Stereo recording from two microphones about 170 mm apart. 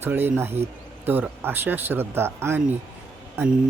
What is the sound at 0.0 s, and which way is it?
Speech, 10° right (ahead or behind).